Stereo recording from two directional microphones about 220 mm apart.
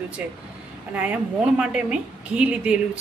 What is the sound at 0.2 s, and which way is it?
A woman's voice, 5° right (ahead or behind).